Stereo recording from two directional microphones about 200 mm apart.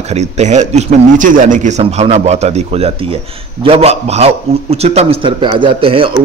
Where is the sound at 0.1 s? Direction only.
35° right (ahead or behind).